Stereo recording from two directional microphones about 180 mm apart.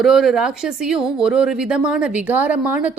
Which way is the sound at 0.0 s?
Centre (ahead or behind).